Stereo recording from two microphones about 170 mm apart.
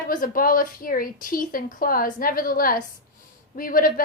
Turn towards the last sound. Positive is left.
turn(degrees=55)  # may be behind; listen again after turning